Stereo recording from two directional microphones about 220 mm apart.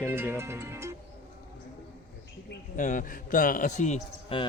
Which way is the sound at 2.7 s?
35° left (ahead or behind).